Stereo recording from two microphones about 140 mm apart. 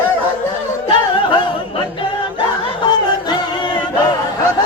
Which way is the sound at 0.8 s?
35° left (ahead or behind).